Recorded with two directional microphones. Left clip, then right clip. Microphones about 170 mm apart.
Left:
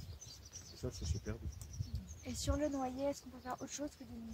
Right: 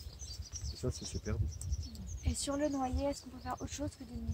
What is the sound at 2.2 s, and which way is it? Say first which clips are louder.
Speech: right 3 dB; 10° left (ahead or behind).